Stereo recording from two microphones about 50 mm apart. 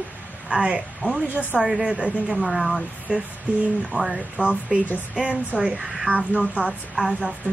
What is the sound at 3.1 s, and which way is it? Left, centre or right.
Speech, right.